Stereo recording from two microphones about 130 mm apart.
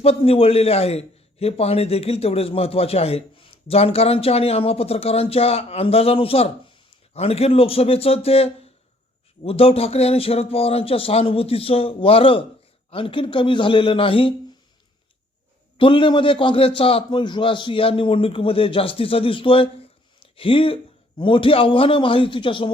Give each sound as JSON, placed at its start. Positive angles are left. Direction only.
{"t": 0.0, "sound": "a man's voice", "side_deg": 50}
{"t": 15.8, "sound": "a man's voice", "side_deg": 40}
{"t": 20.1, "sound": "a sound", "side_deg": 45}
{"t": 21.2, "sound": "a man's voice", "side_deg": 40}